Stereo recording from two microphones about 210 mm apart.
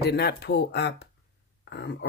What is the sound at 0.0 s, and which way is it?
Speech, 50° left (ahead or behind).